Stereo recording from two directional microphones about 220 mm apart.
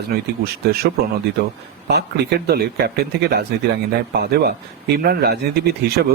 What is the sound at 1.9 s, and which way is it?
Speech, 50° right (ahead or behind).